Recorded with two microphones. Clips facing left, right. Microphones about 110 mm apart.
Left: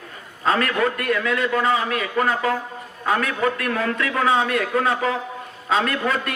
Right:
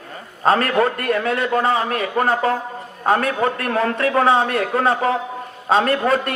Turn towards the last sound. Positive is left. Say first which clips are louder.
# right 5 dB
turn(degrees=-40)  # may be behind; listen again after turning